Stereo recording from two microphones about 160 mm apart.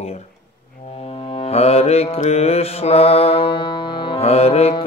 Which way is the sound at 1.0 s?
35° left (ahead or behind).